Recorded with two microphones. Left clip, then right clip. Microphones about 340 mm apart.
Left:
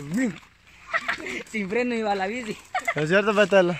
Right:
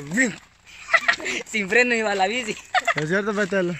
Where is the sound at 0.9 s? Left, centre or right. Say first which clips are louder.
Right 7 dB; right.